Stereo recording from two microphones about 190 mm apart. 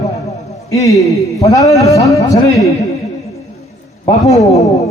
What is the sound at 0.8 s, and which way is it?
Speech, 15° left (ahead or behind).